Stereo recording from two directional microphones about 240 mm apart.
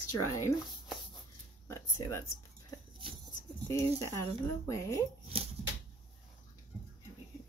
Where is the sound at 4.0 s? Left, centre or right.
Centre.